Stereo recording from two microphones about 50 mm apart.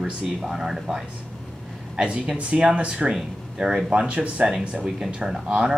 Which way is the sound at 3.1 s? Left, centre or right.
Centre.